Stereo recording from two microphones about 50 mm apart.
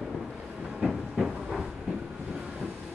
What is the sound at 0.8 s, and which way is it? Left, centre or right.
Train, centre.